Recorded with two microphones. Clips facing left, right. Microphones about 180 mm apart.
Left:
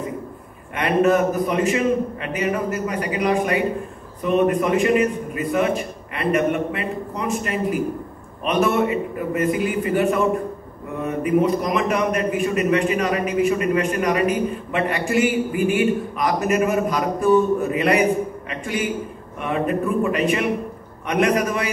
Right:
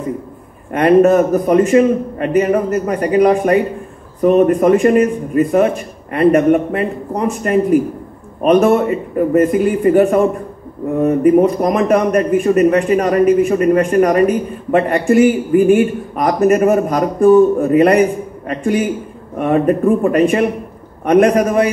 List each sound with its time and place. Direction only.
0.7 s a man's voice: 45° right (ahead or behind)